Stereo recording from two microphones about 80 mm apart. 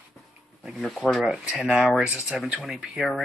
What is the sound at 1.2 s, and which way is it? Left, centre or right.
Speech, centre.